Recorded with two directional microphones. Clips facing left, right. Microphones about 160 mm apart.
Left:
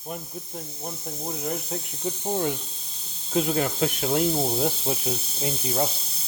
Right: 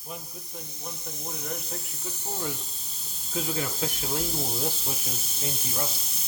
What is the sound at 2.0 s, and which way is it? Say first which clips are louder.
Speech: left 9 dB; 65° left (ahead or behind).